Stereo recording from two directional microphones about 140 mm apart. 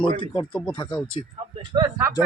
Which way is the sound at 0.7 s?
30° left (ahead or behind).